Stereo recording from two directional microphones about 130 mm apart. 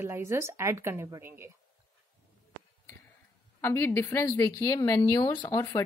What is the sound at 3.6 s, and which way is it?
A woman's voice, 20° left (ahead or behind).